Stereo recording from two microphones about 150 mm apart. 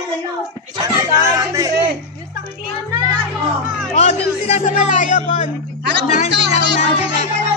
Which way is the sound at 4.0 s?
45° left (ahead or behind).